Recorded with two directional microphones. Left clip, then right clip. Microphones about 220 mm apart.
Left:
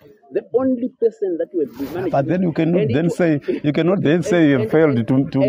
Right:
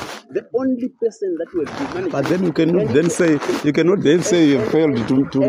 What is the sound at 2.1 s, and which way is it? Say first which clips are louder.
Speech: left 1 dB; 20° left (ahead or behind).